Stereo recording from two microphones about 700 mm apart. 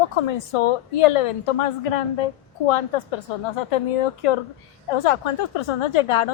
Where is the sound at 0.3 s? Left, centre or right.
Left.